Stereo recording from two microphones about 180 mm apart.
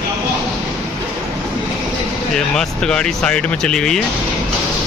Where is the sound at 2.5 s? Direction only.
5° left (ahead or behind).